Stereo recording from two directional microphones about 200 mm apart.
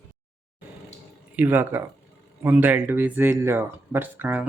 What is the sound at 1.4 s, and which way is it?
Speech, 10° right (ahead or behind).